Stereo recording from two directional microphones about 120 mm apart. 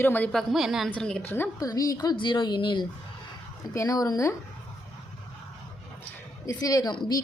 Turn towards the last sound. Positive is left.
turn(degrees=35)  # may be behind; listen again after turning